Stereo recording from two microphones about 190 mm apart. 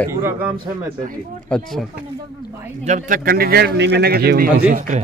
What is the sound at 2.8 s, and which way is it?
Speech, 40° right (ahead or behind).